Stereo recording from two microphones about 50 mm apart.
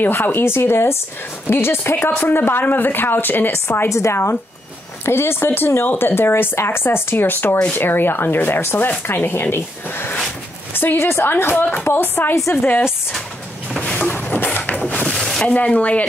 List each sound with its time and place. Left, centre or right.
0.1 s speech: left
3.9 s speech: left
5.0 s a woman's voice: left
13.9 s a sound: left
15.1 s a sound: centre
15.4 s speech: left